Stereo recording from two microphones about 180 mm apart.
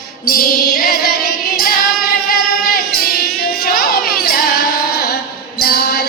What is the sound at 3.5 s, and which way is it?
Music, 55° left (ahead or behind).